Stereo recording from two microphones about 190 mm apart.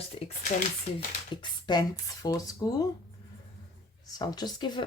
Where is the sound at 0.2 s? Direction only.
30° left (ahead or behind).